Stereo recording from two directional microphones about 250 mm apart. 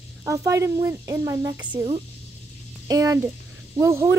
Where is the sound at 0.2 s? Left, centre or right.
Centre.